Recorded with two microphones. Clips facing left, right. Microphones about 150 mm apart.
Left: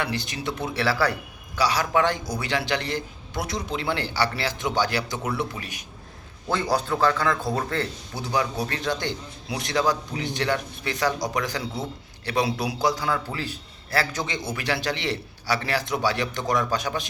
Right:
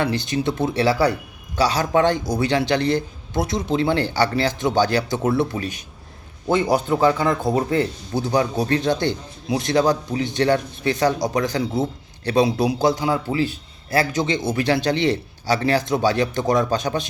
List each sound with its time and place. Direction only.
0.0 s a man's voice: 25° right (ahead or behind)
4.0 s speech: 45° right (ahead or behind)
4.6 s a man's voice: 25° right (ahead or behind)
8.3 s a man's voice: 35° right (ahead or behind)